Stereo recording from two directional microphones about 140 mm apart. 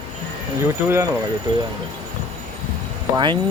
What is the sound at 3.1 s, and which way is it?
Speech, 35° right (ahead or behind).